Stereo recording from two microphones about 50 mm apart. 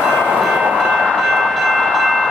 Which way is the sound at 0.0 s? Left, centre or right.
Centre.